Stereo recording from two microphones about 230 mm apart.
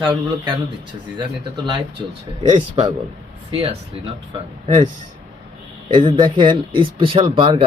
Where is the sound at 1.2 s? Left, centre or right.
Right.